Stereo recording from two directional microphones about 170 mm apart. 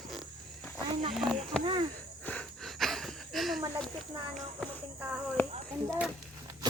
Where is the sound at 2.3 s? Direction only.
5° left (ahead or behind).